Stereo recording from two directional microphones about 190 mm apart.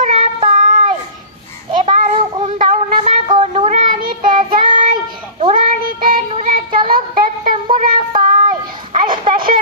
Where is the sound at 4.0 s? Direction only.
50° right (ahead or behind).